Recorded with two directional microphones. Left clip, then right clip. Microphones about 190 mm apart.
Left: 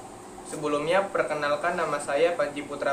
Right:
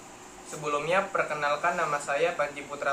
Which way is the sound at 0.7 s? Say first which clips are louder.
Left 2 dB; 20° left (ahead or behind).